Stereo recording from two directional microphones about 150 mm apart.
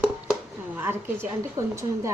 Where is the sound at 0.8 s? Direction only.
15° right (ahead or behind).